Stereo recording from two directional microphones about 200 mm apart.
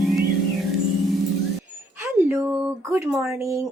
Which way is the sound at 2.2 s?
10° right (ahead or behind).